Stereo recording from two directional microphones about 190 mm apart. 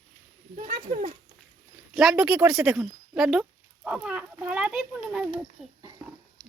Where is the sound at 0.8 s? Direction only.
40° right (ahead or behind).